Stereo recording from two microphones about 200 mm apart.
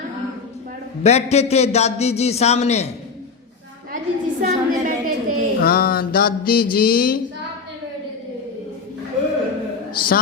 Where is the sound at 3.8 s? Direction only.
40° right (ahead or behind).